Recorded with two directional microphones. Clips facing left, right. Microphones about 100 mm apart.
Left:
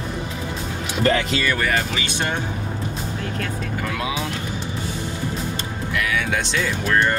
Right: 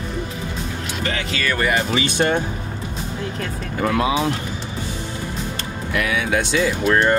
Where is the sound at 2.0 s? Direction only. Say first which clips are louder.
Right 6 dB; 40° right (ahead or behind).